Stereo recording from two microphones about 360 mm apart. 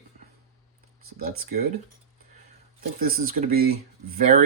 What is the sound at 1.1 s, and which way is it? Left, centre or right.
Speech, right.